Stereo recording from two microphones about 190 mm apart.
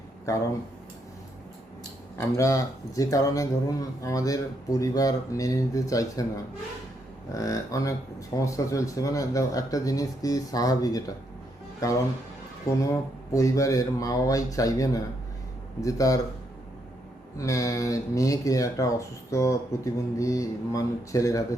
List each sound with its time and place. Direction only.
2.1 s speech: 15° left (ahead or behind)
7.3 s speech: 15° left (ahead or behind)
17.3 s speech: 15° left (ahead or behind)